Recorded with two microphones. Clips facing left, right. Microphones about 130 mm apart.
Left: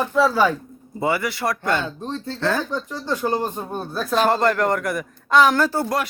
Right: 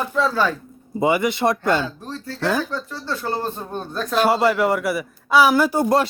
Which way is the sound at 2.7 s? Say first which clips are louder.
Left 2 dB; 15° left (ahead or behind).